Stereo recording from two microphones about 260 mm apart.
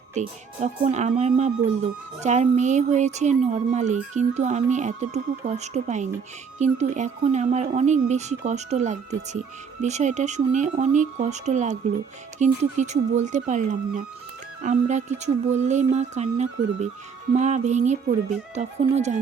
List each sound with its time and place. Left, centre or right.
0.1 s speech: right